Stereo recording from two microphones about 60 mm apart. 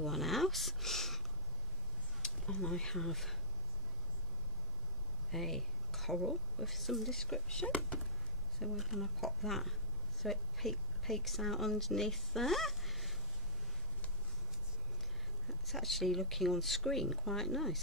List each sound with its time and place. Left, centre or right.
0.0 s speech: centre
2.2 s speech: centre
5.3 s speech: centre
7.6 s speech: left
8.5 s speech: centre
15.4 s speech: centre